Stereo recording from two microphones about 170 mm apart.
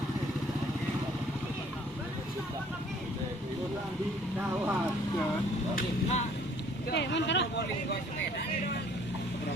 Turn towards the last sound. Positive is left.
turn(degrees=90)